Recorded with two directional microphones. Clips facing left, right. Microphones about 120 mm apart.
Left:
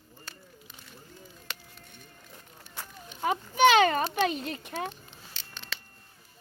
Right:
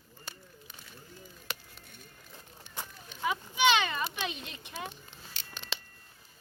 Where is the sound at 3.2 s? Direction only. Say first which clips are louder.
Left 6 dB; 45° left (ahead or behind).